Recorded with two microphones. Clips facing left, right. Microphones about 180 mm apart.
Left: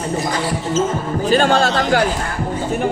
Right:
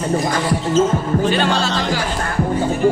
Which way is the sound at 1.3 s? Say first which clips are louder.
Left 4 dB; 50° left (ahead or behind).